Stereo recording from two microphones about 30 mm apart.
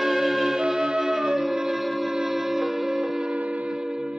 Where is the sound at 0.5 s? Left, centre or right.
Right.